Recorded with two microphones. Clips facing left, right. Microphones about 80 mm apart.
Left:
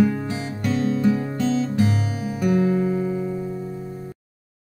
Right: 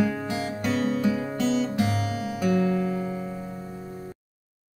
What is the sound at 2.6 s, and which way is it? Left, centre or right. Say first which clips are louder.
Music: left 4 dB; left.